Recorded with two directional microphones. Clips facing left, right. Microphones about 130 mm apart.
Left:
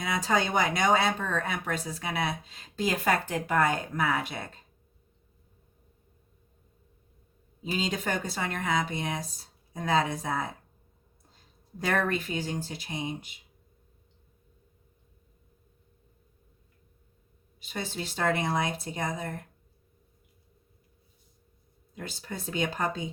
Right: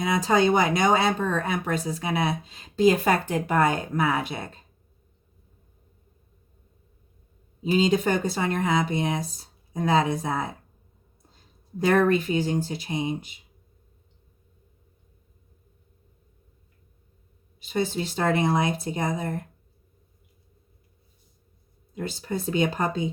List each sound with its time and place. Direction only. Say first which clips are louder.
0.0 s speech: right 6 dB; 25° right (ahead or behind)
7.6 s speech: right 9 dB; 25° right (ahead or behind)
11.8 s speech: right 8 dB; 25° right (ahead or behind)
17.7 s speech: right 9 dB; 25° right (ahead or behind)
21.9 s speech: right 8 dB; 25° right (ahead or behind)